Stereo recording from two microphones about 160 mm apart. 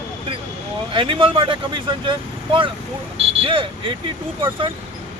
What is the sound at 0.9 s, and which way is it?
Speech, 30° right (ahead or behind).